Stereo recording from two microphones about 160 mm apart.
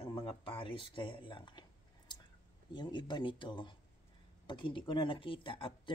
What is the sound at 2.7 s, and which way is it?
Speech, 30° left (ahead or behind).